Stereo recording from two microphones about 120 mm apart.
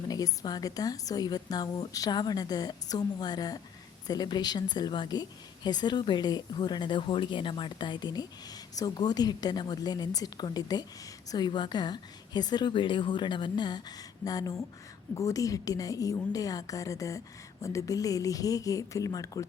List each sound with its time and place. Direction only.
0.1 s a woman's voice: 35° left (ahead or behind)